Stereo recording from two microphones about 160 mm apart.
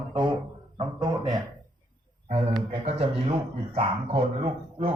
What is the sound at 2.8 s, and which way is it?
Speech, 40° right (ahead or behind).